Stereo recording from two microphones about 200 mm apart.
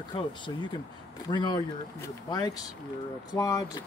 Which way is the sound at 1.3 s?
20° left (ahead or behind).